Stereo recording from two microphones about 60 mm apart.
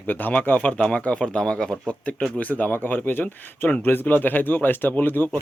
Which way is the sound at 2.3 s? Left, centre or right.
Left.